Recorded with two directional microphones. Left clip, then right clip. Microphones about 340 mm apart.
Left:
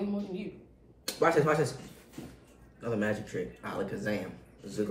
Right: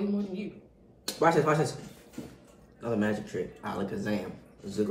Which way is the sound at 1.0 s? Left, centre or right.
Centre.